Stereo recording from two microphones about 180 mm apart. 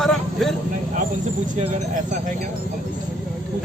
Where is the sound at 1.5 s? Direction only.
45° right (ahead or behind).